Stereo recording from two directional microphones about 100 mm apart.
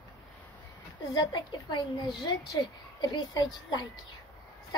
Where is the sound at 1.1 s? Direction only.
50° left (ahead or behind).